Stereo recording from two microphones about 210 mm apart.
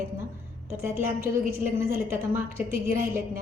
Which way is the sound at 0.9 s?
10° right (ahead or behind).